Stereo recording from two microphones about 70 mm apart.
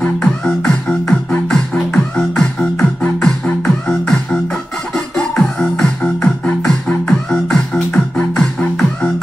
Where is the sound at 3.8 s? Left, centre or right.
Centre.